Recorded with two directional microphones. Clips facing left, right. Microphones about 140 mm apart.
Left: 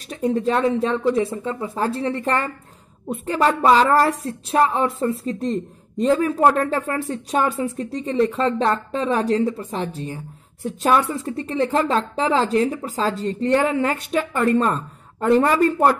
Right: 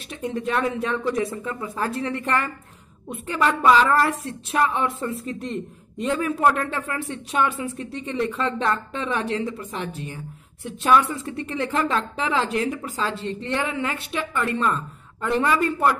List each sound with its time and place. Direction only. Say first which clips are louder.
0.1 s speech: left 5 dB; 35° left (ahead or behind)